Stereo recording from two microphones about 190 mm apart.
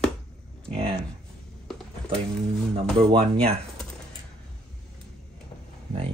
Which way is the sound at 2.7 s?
30° right (ahead or behind).